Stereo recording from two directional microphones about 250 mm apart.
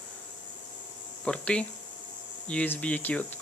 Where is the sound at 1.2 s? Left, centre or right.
Centre.